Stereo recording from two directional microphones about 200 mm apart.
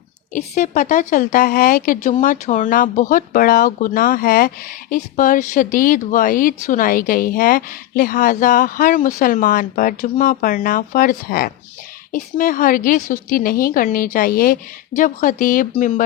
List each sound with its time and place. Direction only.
0.3 s speech: 40° left (ahead or behind)